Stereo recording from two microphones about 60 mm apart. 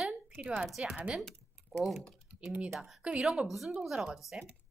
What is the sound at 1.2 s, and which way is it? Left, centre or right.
A woman's voice, centre.